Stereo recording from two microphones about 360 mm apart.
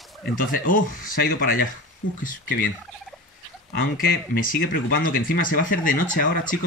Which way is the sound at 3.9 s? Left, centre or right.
Left.